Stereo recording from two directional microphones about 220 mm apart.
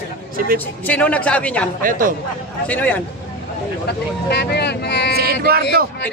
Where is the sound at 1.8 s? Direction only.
40° right (ahead or behind).